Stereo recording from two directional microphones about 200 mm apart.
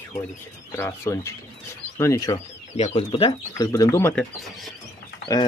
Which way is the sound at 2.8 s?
30° left (ahead or behind).